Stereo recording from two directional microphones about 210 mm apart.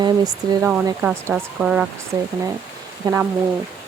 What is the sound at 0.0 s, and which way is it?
Speech, 15° right (ahead or behind).